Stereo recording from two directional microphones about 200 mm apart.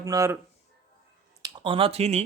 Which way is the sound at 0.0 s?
15° right (ahead or behind).